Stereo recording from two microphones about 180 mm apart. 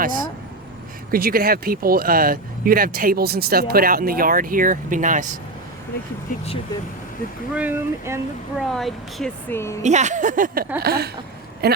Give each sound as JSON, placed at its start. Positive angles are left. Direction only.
{"t": 1.1, "sound": "speech", "side_deg": -55}
{"t": 7.5, "sound": "speech", "side_deg": -10}
{"t": 8.5, "sound": "speech", "side_deg": 0}
{"t": 9.5, "sound": "a woman's voice", "side_deg": 15}
{"t": 9.8, "sound": "speech", "side_deg": -40}
{"t": 10.8, "sound": "a sound", "side_deg": -60}